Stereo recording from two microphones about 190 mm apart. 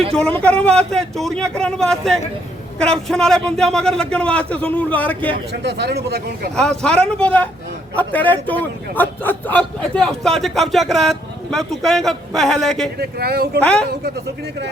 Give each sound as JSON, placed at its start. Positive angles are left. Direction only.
{"t": 0.1, "sound": "a man's voice", "side_deg": 5}
{"t": 5.6, "sound": "a man's voice", "side_deg": -60}
{"t": 6.6, "sound": "a man's voice", "side_deg": 5}
{"t": 13.0, "sound": "speech", "side_deg": -55}
{"t": 13.6, "sound": "a man's voice", "side_deg": 5}